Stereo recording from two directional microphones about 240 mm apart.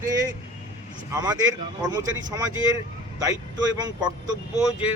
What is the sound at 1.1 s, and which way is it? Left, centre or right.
Speech, centre.